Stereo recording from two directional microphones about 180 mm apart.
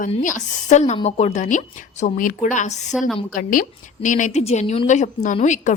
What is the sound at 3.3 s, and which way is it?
A woman's voice, 50° left (ahead or behind).